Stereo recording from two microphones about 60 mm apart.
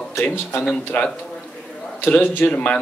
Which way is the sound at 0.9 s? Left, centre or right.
Left.